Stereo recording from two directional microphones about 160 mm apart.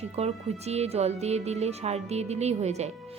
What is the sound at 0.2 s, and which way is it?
A woman's voice, 40° right (ahead or behind).